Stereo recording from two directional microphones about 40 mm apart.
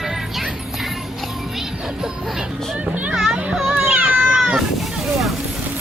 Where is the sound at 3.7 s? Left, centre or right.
Right.